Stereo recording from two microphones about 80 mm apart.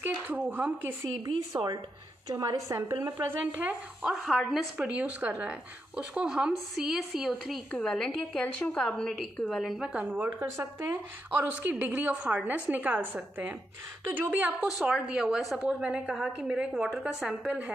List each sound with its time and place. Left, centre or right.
0.0 s a woman's voice: right
1.2 s speech: right
2.3 s a woman's voice: right
3.0 s a woman's voice: right
4.0 s speech: centre
4.7 s a woman's voice: centre
9.6 s speech: centre
9.9 s a woman's voice: centre
14.6 s speech: centre